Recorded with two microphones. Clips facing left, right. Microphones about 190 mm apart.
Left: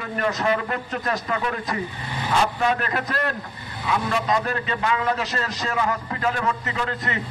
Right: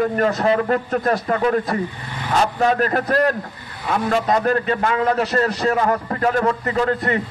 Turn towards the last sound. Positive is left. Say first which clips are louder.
# right 8 dB
turn(degrees=-40)  # may be behind; listen again after turning